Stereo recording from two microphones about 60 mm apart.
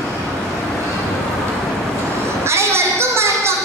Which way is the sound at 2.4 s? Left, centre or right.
Right.